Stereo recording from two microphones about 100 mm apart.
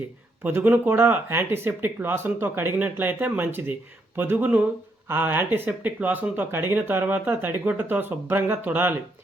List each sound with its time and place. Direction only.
0.4 s speech: 15° right (ahead or behind)